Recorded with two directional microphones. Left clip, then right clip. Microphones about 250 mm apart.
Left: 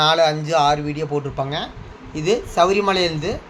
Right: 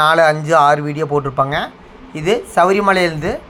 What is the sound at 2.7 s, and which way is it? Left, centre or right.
Speech, centre.